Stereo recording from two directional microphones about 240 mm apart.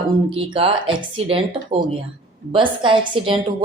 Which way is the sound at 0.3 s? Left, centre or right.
Right.